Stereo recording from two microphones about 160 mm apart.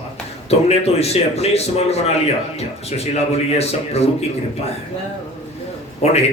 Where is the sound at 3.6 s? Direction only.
40° left (ahead or behind).